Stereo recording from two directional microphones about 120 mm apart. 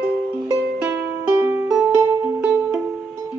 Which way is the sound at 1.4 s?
15° right (ahead or behind).